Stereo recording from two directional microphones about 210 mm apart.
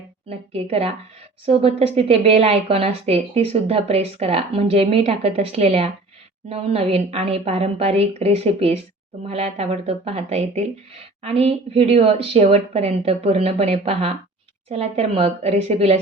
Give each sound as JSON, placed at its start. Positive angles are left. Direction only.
{"t": 0.3, "sound": "a woman's voice", "side_deg": -30}